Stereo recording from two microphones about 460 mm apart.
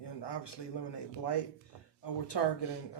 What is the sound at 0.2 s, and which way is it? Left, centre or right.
Speech, left.